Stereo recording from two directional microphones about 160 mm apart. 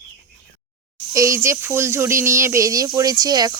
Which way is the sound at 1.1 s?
20° right (ahead or behind).